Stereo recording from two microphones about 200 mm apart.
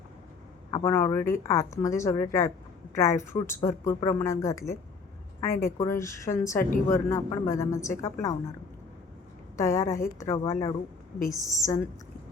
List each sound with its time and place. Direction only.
0.7 s a woman's voice: 15° left (ahead or behind)
9.6 s a woman's voice: 15° left (ahead or behind)